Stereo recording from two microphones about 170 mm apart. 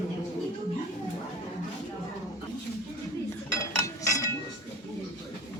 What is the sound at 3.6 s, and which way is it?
Cutlery, 20° left (ahead or behind).